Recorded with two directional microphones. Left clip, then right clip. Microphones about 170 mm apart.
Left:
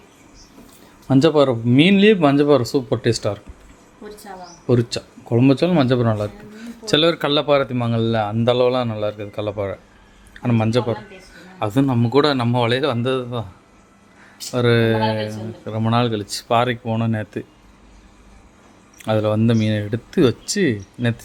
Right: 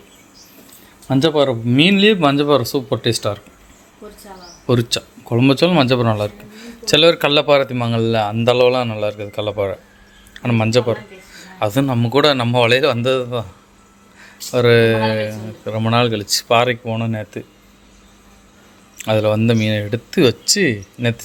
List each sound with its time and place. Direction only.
1.0 s speech: 10° left (ahead or behind)
4.6 s speech: 5° right (ahead or behind)
16.8 s speech: 15° left (ahead or behind)
18.9 s speech: centre (ahead or behind)